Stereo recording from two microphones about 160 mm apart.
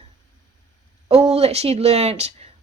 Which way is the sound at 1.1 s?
40° right (ahead or behind).